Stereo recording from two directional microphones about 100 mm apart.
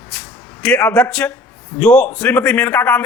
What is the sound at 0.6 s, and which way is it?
A man's voice, 15° left (ahead or behind).